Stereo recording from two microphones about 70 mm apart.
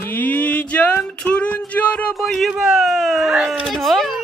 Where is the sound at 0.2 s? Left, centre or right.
Left.